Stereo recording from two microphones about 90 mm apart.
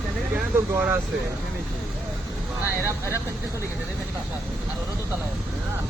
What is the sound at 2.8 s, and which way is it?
Speech, 30° right (ahead or behind).